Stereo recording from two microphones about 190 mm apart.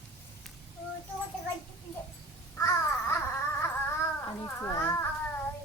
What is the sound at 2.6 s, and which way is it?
Babbling, 15° left (ahead or behind).